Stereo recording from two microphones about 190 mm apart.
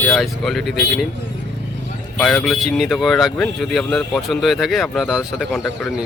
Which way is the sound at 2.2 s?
5° left (ahead or behind).